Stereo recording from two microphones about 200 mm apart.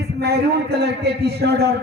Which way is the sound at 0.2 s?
55° right (ahead or behind).